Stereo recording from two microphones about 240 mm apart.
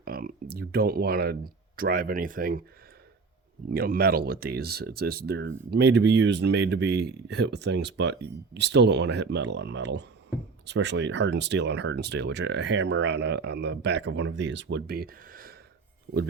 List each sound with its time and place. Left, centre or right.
0.0 s speech: right
3.7 s speech: right